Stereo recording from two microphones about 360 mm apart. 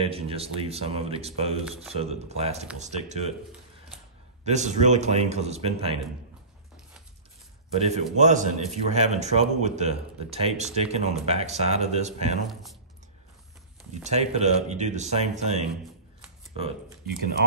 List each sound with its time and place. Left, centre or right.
0.0 s a man's voice: centre
1.6 s speech: centre
2.0 s a man's voice: centre
4.5 s a man's voice: centre
7.7 s speech: centre
14.0 s speech: centre